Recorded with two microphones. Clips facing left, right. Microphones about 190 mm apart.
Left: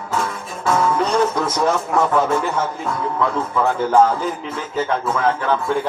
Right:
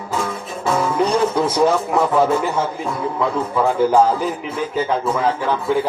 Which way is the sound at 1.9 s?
10° right (ahead or behind).